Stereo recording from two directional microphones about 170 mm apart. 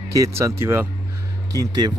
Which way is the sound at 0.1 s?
15° right (ahead or behind).